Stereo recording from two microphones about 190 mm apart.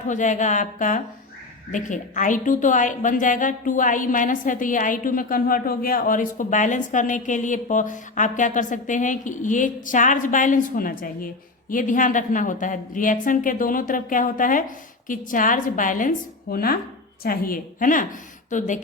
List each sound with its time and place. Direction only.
0.1 s a woman's voice: 40° left (ahead or behind)